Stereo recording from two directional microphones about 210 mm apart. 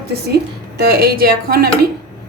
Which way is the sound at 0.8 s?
45° right (ahead or behind).